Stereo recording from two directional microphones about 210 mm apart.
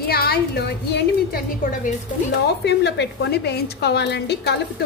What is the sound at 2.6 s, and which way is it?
A woman's voice, 55° left (ahead or behind).